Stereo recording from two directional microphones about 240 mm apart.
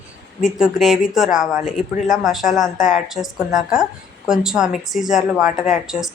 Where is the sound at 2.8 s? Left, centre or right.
Left.